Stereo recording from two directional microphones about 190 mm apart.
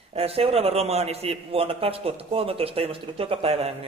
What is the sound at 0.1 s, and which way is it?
Speech, 30° right (ahead or behind).